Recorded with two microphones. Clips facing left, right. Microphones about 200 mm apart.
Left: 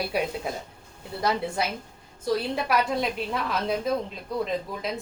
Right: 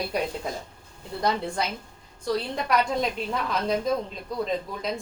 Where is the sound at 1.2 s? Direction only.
5° left (ahead or behind).